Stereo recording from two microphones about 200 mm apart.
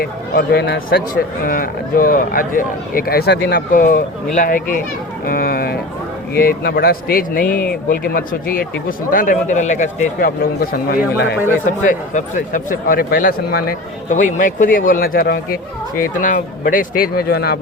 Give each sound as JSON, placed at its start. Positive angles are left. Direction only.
{"t": 0.0, "sound": "speech", "side_deg": 50}